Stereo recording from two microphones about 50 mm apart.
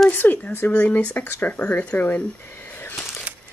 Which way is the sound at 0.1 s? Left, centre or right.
Left.